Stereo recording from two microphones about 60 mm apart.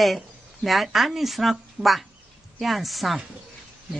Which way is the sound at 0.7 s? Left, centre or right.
Centre.